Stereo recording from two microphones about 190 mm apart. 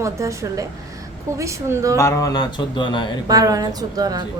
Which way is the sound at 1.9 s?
15° left (ahead or behind).